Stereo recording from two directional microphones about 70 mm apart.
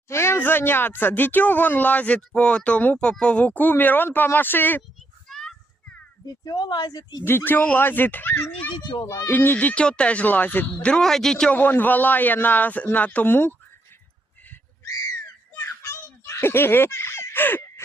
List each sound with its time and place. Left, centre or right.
0.1 s speech: left
5.3 s children playing: centre
6.2 s speech: left
7.3 s speech: left
10.8 s speech: centre
11.5 s speech: left
15.5 s baby laughter: left